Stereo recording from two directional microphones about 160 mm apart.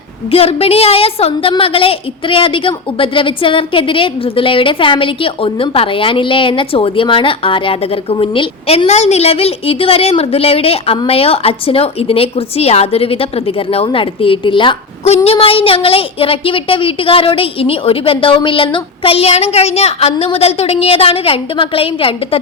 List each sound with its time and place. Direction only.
0.3 s a woman's voice: 40° left (ahead or behind)